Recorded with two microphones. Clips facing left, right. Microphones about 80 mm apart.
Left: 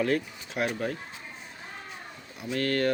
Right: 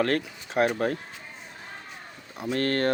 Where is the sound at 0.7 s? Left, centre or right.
Right.